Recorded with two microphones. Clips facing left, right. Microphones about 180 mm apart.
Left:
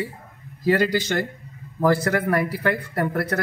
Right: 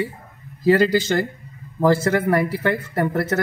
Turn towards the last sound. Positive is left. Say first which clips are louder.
# right 3 dB
turn(degrees=-25)  # may be behind; listen again after turning